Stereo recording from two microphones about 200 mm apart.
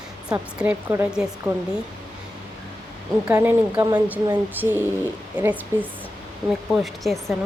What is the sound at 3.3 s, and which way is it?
A woman's voice, 10° right (ahead or behind).